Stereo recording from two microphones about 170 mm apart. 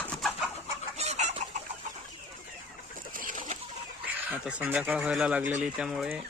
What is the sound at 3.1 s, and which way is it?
Chicken, 55° right (ahead or behind).